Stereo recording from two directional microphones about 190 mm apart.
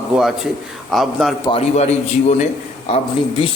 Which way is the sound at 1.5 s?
30° left (ahead or behind).